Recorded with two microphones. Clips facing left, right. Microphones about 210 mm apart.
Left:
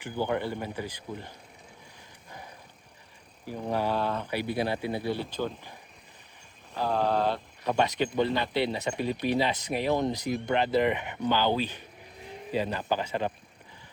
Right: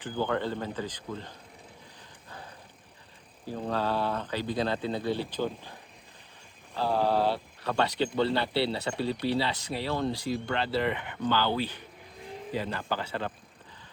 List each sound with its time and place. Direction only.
0.0 s speech: 15° left (ahead or behind)
3.4 s speech: 15° left (ahead or behind)
6.8 s speech: 10° right (ahead or behind)
7.6 s speech: 15° left (ahead or behind)